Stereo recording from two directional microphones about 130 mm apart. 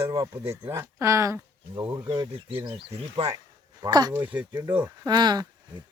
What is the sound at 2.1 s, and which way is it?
Speech, 40° right (ahead or behind).